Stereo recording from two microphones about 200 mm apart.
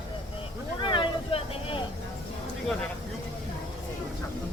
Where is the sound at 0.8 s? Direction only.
25° left (ahead or behind).